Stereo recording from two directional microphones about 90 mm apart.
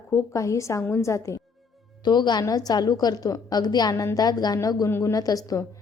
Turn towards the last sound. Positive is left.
turn(degrees=40)  # may be behind; listen again after turning